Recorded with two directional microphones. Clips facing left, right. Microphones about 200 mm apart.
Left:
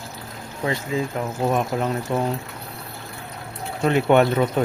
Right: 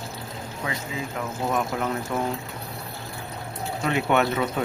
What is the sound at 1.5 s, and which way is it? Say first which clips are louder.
Speech: left 3 dB; 25° left (ahead or behind).